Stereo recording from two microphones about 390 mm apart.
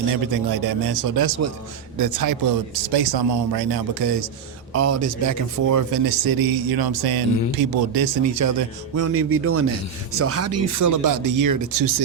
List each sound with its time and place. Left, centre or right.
0.5 s speech: right
4.7 s speech: right
8.2 s a man's voice: right